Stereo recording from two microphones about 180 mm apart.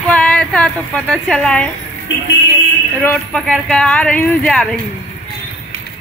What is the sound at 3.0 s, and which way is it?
Speech, 5° left (ahead or behind).